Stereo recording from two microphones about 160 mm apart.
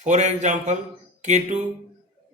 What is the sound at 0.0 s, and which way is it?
A man's voice, 50° right (ahead or behind).